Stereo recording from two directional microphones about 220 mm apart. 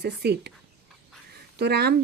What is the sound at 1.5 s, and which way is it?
Speech, 45° right (ahead or behind).